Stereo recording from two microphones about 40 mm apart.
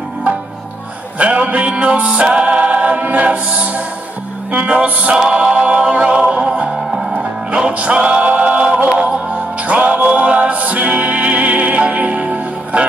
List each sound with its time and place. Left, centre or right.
1.1 s music: right
2.4 s choir: right
4.5 s music: right
5.1 s music: right
6.9 s music: centre
7.2 s music: right